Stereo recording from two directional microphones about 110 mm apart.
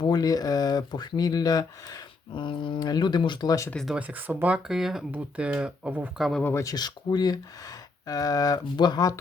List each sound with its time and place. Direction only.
0.0 s speech: 35° left (ahead or behind)
2.3 s speech: 45° left (ahead or behind)
3.8 s speech: 15° right (ahead or behind)
6.1 s speech: centre (ahead or behind)
6.4 s speech: 25° left (ahead or behind)